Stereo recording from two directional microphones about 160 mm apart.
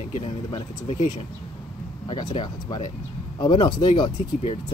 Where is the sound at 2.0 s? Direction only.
30° left (ahead or behind).